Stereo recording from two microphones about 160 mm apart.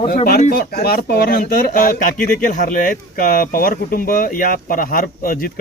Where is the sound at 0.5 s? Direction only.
75° left (ahead or behind).